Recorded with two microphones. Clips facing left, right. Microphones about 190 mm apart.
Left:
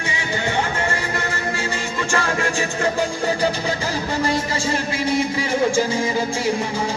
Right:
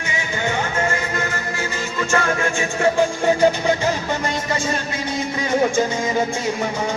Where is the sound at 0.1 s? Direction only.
30° left (ahead or behind).